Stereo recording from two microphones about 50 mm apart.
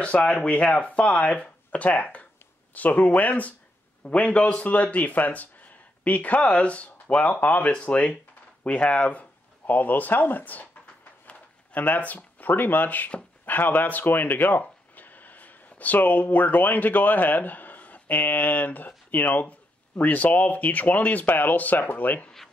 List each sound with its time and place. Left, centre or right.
0.0 s speech: left